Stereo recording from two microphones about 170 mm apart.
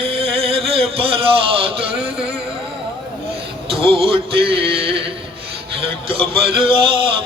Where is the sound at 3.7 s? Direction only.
35° right (ahead or behind).